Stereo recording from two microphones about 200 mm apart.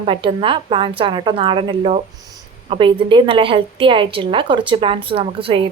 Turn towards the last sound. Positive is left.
turn(degrees=-25)  # may be behind; listen again after turning